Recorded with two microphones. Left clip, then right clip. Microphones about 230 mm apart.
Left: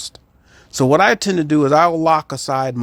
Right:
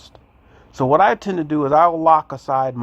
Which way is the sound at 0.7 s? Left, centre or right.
Left.